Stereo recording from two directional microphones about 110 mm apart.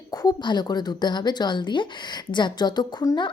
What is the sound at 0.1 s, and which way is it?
A woman's voice, 40° left (ahead or behind).